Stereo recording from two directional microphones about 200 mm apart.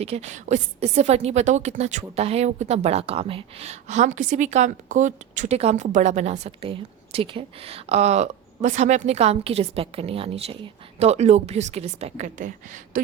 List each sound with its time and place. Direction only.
0.0 s a woman's voice: 30° right (ahead or behind)